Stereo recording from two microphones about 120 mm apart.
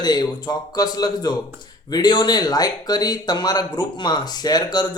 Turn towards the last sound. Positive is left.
turn(degrees=35)  # may be behind; listen again after turning